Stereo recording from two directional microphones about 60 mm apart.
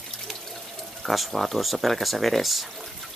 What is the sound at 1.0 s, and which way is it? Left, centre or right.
Speech, centre.